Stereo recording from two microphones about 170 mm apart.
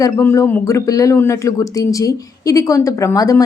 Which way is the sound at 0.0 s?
15° left (ahead or behind).